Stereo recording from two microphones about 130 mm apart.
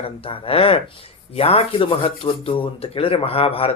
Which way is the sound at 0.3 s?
45° left (ahead or behind).